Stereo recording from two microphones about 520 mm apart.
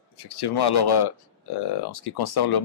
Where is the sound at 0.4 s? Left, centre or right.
Left.